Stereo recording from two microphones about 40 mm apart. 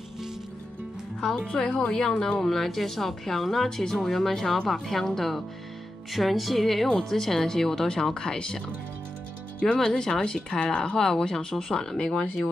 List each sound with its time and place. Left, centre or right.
1.5 s a woman's voice: left
2.4 s a woman's voice: centre
8.1 s a woman's voice: left
9.8 s speech: centre